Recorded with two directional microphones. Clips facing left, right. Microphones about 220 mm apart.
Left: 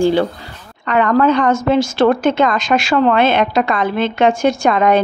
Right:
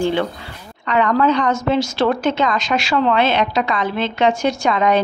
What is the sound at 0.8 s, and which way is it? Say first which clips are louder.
A woman's voice: left 3 dB; 50° left (ahead or behind).